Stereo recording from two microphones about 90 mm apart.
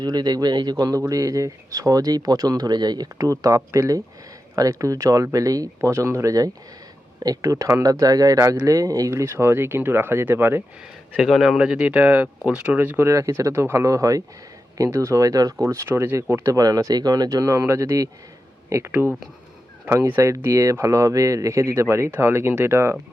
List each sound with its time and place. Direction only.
0.0 s speech: 50° right (ahead or behind); by 10.6 s 25° right (ahead or behind)
11.2 s speech: centre (ahead or behind); by 13.1 s 20° right (ahead or behind)
13.1 s speech: 35° right (ahead or behind)
18.9 s speech: 20° right (ahead or behind)